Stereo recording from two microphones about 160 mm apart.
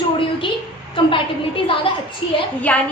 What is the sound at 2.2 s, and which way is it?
Speech, 35° left (ahead or behind).